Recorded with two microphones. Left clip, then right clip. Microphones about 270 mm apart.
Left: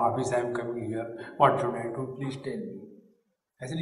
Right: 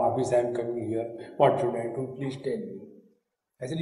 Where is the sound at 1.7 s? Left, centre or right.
Right.